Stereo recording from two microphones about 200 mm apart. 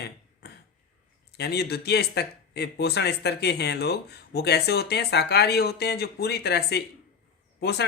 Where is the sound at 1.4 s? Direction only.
55° left (ahead or behind).